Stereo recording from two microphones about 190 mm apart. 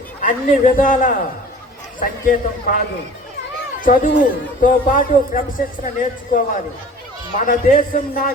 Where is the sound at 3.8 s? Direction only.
45° left (ahead or behind).